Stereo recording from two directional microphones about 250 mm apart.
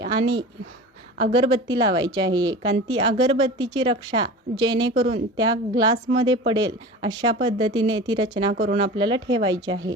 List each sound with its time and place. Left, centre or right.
0.0 s a woman's voice: centre